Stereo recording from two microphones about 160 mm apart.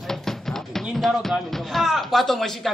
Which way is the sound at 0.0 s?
Centre (ahead or behind).